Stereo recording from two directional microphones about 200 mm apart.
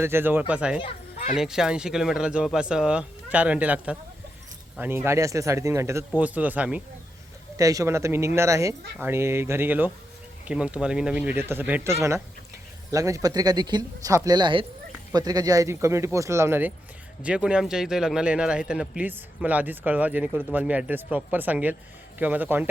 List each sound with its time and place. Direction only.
0.0 s a man's voice: 10° right (ahead or behind)
0.8 s speech: 25° left (ahead or behind)
1.4 s a man's voice: 5° right (ahead or behind)
7.5 s a man's voice: 15° right (ahead or behind)